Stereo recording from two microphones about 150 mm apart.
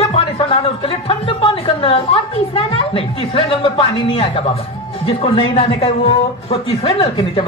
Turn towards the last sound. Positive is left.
turn(degrees=40)  # may be behind; listen again after turning